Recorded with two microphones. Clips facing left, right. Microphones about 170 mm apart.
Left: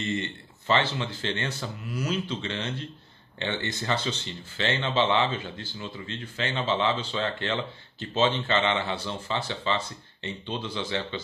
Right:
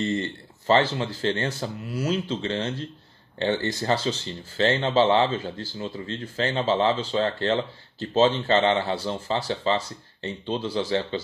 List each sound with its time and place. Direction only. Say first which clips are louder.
0.0 s speech: right 4 dB; 40° right (ahead or behind)